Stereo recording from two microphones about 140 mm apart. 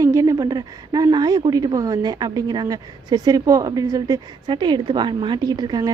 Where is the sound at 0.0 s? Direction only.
20° right (ahead or behind).